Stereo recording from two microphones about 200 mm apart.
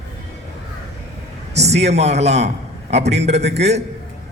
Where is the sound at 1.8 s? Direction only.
35° right (ahead or behind).